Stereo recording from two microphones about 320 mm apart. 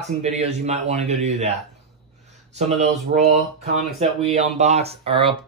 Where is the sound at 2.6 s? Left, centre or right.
Right.